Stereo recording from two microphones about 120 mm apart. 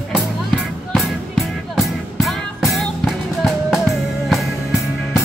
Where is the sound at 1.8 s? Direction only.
Centre (ahead or behind).